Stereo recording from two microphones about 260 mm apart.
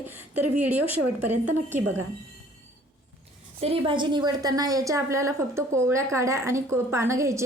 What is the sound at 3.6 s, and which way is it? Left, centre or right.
A woman's voice, centre.